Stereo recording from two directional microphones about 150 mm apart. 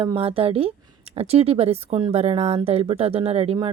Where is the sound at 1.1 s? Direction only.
40° right (ahead or behind).